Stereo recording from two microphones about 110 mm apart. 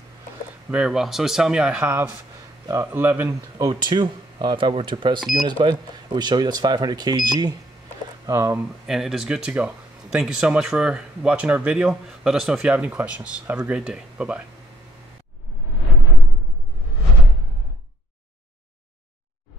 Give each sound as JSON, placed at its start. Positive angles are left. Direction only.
{"t": 0.7, "sound": "speech", "side_deg": -5}
{"t": 3.5, "sound": "speech", "side_deg": -40}
{"t": 8.3, "sound": "speech", "side_deg": -30}
{"t": 8.8, "sound": "speech", "side_deg": -5}